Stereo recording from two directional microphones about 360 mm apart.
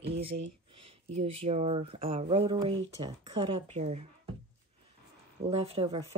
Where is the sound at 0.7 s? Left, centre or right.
Centre.